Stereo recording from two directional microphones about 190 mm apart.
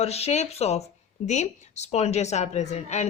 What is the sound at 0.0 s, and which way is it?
A woman's voice, 35° left (ahead or behind).